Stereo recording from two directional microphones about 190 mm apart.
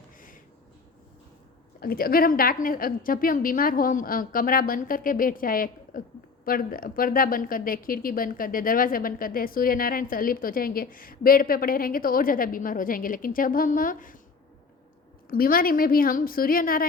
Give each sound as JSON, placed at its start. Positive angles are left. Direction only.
{"t": 1.8, "sound": "speech", "side_deg": 50}
{"t": 15.3, "sound": "speech", "side_deg": 50}